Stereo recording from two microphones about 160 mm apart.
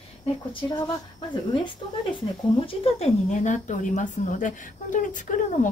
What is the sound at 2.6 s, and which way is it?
A woman's voice, 35° left (ahead or behind).